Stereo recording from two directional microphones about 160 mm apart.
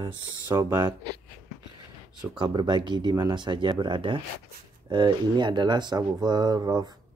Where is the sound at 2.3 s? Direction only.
25° right (ahead or behind).